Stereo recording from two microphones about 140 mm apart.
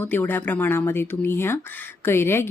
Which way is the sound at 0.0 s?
15° left (ahead or behind).